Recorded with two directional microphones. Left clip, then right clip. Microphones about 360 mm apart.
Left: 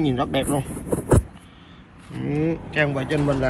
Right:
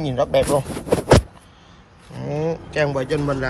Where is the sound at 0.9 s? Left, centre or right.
Right.